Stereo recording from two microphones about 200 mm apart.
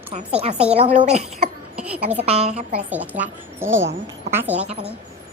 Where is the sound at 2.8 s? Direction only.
10° right (ahead or behind).